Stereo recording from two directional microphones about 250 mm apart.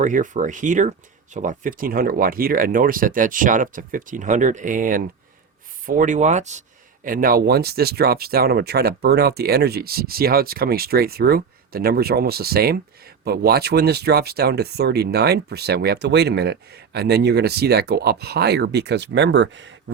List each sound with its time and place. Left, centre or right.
0.0 s speech: right